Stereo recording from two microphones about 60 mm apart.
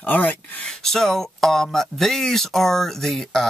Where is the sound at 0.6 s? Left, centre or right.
Centre.